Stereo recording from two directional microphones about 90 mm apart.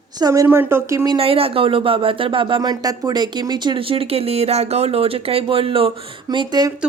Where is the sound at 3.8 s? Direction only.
90° right.